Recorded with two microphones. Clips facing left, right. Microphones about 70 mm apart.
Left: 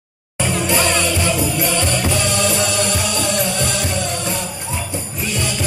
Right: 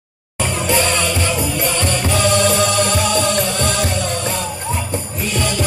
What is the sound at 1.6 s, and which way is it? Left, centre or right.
Music, right.